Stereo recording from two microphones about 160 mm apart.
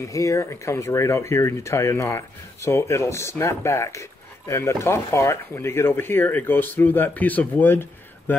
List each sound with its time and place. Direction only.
0.0 s speech: 20° left (ahead or behind)